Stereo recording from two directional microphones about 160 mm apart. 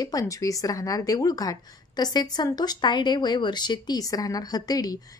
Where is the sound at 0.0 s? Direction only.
20° left (ahead or behind).